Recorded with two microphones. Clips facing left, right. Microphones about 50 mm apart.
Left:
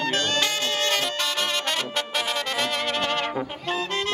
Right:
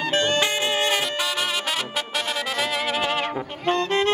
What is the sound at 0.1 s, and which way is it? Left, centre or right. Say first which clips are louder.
Music: right 3 dB; centre.